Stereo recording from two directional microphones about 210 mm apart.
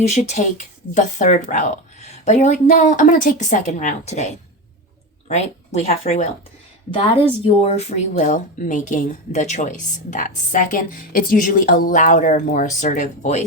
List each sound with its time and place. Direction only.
0.0 s speech: 35° left (ahead or behind)
7.4 s speech: 30° left (ahead or behind)